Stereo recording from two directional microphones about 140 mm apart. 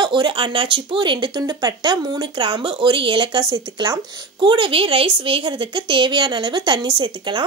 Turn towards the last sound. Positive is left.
turn(degrees=-35)  # may be behind; listen again after turning